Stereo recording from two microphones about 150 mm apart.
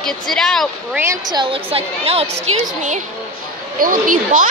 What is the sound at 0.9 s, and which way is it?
Speech, 15° right (ahead or behind).